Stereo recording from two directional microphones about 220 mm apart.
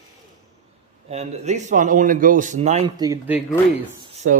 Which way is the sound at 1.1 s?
30° right (ahead or behind).